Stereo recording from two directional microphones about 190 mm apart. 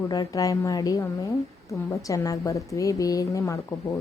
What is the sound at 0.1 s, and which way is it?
Speech, 20° left (ahead or behind).